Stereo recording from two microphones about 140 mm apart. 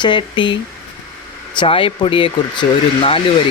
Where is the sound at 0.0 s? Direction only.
35° left (ahead or behind).